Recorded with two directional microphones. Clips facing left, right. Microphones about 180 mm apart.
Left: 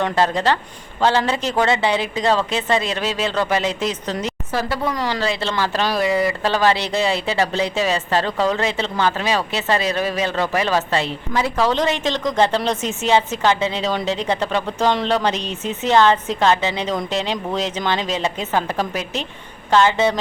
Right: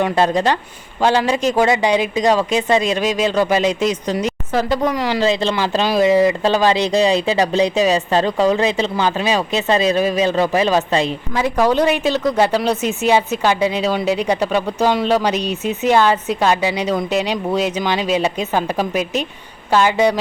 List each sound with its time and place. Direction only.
0.0 s speech: 15° right (ahead or behind)